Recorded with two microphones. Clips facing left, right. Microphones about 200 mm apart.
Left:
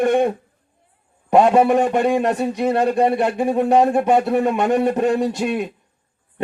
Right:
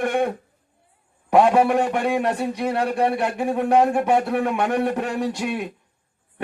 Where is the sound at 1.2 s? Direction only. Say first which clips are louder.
Left 3 dB; 20° left (ahead or behind).